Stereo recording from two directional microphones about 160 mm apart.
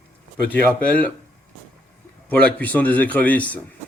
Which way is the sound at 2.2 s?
10° left (ahead or behind).